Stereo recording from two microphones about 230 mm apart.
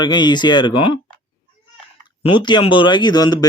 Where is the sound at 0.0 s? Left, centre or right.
Centre.